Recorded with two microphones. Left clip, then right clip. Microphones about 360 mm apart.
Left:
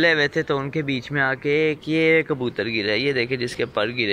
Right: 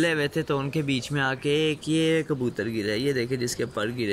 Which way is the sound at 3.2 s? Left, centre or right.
Left.